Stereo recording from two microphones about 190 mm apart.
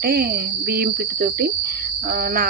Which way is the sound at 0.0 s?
55° right (ahead or behind).